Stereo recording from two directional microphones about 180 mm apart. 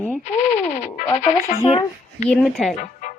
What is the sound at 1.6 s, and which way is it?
Speech, 30° left (ahead or behind).